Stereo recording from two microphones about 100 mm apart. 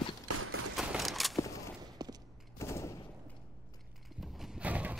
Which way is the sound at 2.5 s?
30° left (ahead or behind).